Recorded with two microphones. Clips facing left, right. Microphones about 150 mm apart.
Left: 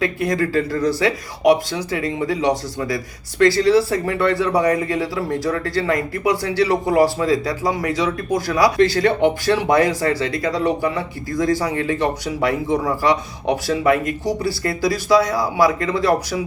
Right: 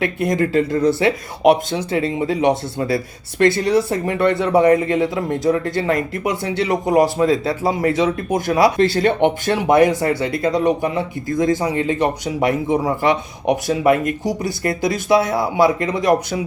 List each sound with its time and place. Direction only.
0.0 s speech: 25° right (ahead or behind)